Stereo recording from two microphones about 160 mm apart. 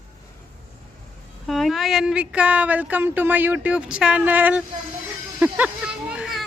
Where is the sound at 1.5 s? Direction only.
Centre (ahead or behind).